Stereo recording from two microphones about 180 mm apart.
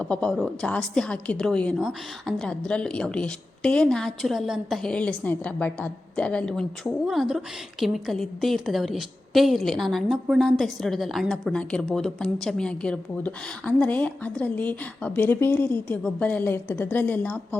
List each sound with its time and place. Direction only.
0.0 s a woman's voice: 5° left (ahead or behind)